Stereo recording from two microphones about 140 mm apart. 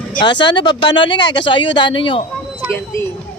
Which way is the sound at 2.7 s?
20° left (ahead or behind).